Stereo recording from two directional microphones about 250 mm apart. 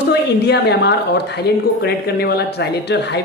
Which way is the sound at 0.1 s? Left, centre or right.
Left.